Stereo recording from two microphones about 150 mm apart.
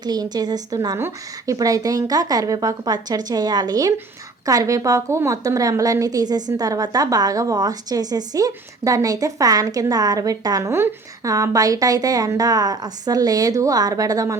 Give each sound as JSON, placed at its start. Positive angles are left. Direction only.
{"t": 0.0, "sound": "a woman's voice", "side_deg": -25}